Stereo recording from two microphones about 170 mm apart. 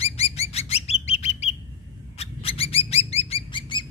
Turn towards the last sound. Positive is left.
turn(degrees=30)  # may be behind; listen again after turning